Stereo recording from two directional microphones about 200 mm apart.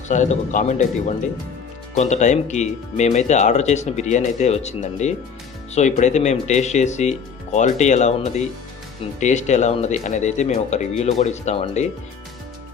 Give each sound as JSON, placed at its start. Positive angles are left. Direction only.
{"t": 0.1, "sound": "speech", "side_deg": 35}